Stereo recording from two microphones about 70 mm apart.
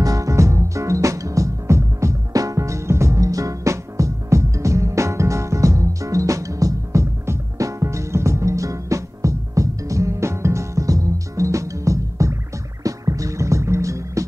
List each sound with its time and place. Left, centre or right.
0.0 s music: right